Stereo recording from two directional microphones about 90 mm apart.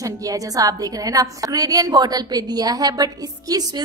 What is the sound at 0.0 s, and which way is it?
A woman's voice, 40° right (ahead or behind).